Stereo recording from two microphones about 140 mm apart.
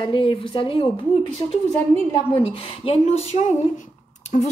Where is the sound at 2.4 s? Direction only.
45° left (ahead or behind).